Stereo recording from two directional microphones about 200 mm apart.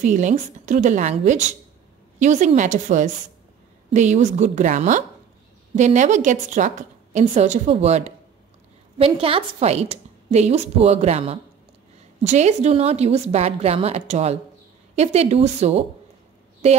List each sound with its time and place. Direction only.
0.0 s a woman's voice: 40° right (ahead or behind)